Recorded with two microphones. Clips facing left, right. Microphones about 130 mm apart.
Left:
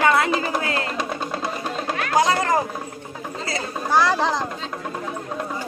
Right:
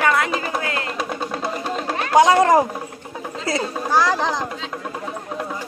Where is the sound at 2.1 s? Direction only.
75° right (ahead or behind).